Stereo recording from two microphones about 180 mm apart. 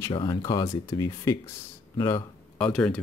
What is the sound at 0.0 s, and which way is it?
Speech, 25° left (ahead or behind).